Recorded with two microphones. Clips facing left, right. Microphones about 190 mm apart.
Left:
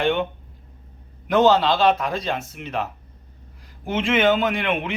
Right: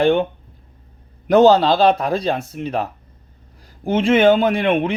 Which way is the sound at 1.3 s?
40° right (ahead or behind).